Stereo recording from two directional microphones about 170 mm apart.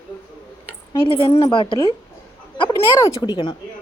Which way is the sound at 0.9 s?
30° left (ahead or behind).